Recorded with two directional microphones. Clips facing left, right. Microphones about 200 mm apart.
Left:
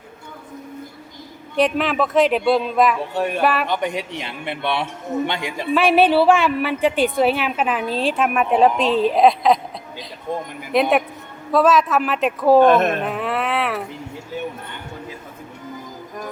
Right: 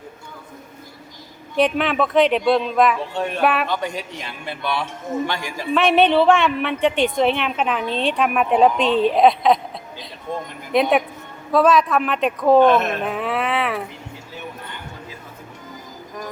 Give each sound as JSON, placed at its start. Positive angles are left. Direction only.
{"t": 1.5, "sound": "a woman's voice", "side_deg": 0}
{"t": 3.4, "sound": "a woman's voice", "side_deg": 0}
{"t": 3.7, "sound": "a man's voice", "side_deg": 20}
{"t": 5.7, "sound": "a woman's voice", "side_deg": 5}
{"t": 10.7, "sound": "a woman's voice", "side_deg": 0}
{"t": 12.6, "sound": "speech", "side_deg": 50}
{"t": 13.1, "sound": "a sound", "side_deg": 0}